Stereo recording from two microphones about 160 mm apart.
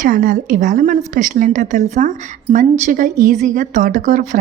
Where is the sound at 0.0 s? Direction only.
55° right (ahead or behind).